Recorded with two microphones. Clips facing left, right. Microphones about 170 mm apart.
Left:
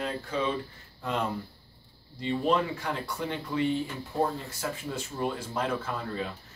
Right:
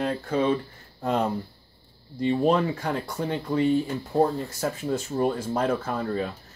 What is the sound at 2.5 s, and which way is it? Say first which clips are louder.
Speech: right 4 dB; 45° right (ahead or behind).